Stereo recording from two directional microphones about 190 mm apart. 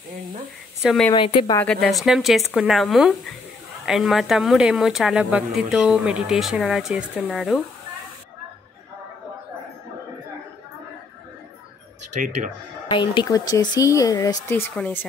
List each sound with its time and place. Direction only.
0.8 s speech: 5° left (ahead or behind)
1.1 s speech: 25° left (ahead or behind)
1.6 s speech: centre (ahead or behind)
12.2 s speech: 40° right (ahead or behind)
12.8 s speech: 25° left (ahead or behind)